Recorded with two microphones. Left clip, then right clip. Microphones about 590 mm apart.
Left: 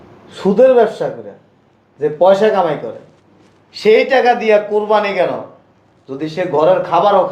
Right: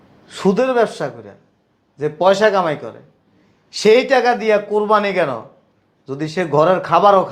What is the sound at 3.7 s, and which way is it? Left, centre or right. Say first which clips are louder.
A man's voice: left 2 dB; right.